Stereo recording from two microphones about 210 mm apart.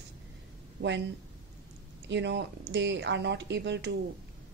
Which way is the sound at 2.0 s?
55° right (ahead or behind).